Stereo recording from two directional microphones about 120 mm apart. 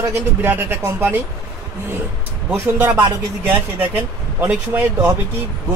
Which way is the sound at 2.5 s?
15° right (ahead or behind).